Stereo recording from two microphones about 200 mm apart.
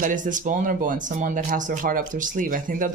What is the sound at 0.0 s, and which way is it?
Speech, 40° right (ahead or behind).